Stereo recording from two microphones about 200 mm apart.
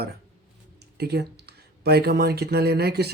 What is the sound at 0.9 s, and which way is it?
Speech, 55° right (ahead or behind).